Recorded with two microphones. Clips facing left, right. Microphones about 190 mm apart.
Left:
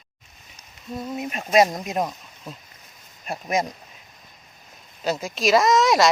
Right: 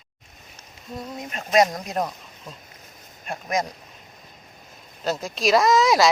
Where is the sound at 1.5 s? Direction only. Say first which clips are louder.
Left 1 dB; 25° left (ahead or behind).